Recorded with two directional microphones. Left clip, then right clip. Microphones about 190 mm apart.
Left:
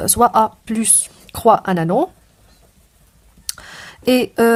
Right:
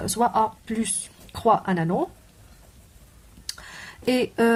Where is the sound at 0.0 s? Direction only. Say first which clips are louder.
Left 8 dB; 45° left (ahead or behind).